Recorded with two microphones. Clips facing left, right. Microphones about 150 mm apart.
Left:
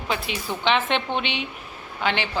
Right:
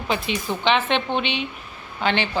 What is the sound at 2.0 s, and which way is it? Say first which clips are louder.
Speech: right 2 dB; 5° left (ahead or behind).